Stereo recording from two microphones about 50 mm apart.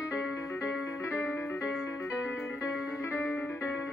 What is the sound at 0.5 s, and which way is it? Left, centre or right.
Music, left.